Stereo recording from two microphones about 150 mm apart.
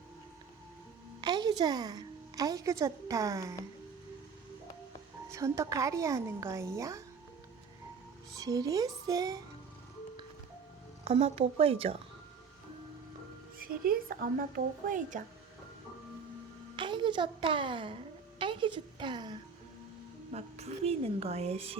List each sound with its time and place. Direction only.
1.2 s a woman's voice: 30° right (ahead or behind)
5.3 s a woman's voice: 20° right (ahead or behind)
8.4 s a woman's voice: 25° right (ahead or behind)
11.0 s a woman's voice: 40° right (ahead or behind)
13.6 s speech: 75° right (ahead or behind)
16.7 s a sound: 30° right (ahead or behind)
20.3 s a woman's voice: 45° right (ahead or behind)